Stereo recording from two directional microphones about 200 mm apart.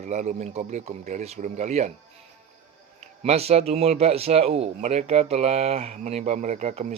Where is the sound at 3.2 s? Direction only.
30° right (ahead or behind).